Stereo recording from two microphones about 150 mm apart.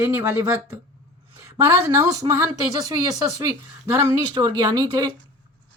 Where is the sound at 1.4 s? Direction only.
20° right (ahead or behind).